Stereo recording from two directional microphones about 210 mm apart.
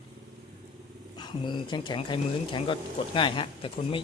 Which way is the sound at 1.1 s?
20° left (ahead or behind).